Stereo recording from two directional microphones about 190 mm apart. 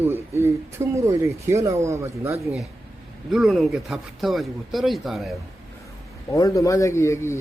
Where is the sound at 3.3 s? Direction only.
Centre (ahead or behind).